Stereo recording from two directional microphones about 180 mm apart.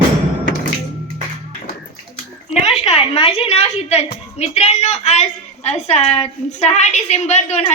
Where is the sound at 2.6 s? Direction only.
30° left (ahead or behind).